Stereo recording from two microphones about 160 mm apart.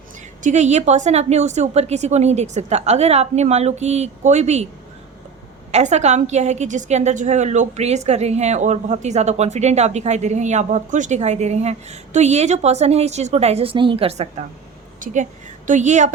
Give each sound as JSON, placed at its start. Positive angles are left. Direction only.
{"t": 0.4, "sound": "a woman's voice", "side_deg": -45}
{"t": 5.7, "sound": "a woman's voice", "side_deg": -45}
{"t": 15.0, "sound": "a woman's voice", "side_deg": -50}